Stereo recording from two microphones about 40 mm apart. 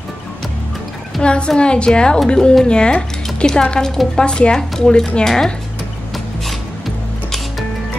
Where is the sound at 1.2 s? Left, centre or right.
Left.